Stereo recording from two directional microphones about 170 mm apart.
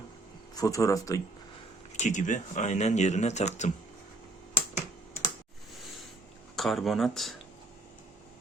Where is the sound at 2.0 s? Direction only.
45° left (ahead or behind).